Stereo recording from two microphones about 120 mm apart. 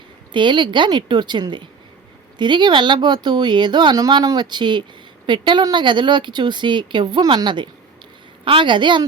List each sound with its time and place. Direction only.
0.3 s speech: 40° right (ahead or behind)